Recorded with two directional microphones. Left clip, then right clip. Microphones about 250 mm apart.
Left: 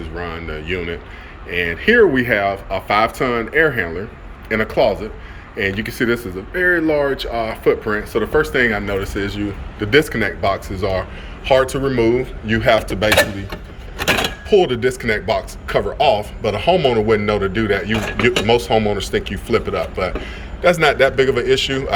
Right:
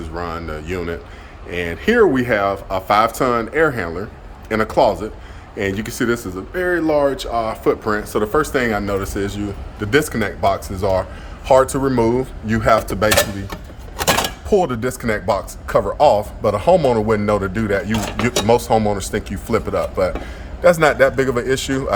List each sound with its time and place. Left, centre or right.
0.2 s speech: centre
14.5 s speech: right